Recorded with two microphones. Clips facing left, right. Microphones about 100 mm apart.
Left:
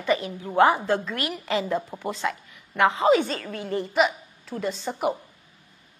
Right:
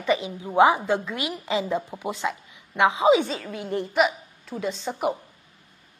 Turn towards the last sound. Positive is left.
turn(degrees=0)  # may be behind; listen again after turning